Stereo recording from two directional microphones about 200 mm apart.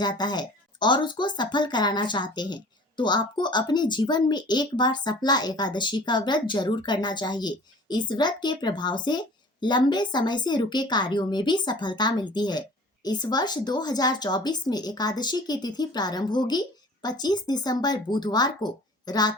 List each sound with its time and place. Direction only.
0.0 s speech: 20° left (ahead or behind)